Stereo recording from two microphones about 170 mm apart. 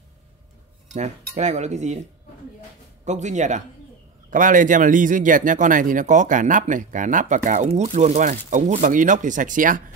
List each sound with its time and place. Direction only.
0.9 s a man's voice: 45° right (ahead or behind)
3.1 s a man's voice: 45° right (ahead or behind)